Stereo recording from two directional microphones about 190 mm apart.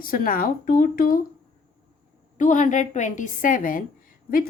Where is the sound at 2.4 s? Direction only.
40° left (ahead or behind).